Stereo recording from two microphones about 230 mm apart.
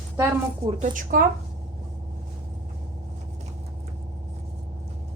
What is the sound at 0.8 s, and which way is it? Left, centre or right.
Speech, right.